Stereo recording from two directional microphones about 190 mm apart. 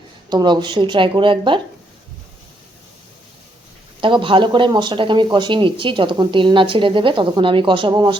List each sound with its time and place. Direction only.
0.3 s speech: 25° right (ahead or behind)
4.0 s speech: 25° right (ahead or behind)